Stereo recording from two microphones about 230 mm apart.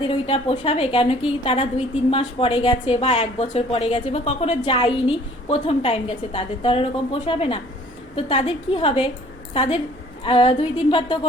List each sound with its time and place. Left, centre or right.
0.1 s a woman's voice: left
10.2 s a woman's voice: left